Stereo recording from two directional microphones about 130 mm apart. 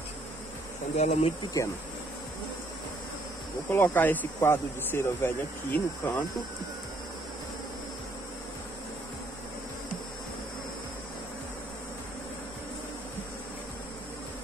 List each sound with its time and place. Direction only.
0.9 s speech: 60° left (ahead or behind)
1.6 s speech: 25° left (ahead or behind)
3.7 s speech: 15° left (ahead or behind)